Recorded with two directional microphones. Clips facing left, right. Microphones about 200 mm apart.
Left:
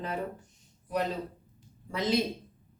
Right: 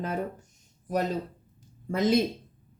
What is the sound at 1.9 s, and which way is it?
Speech, 50° right (ahead or behind).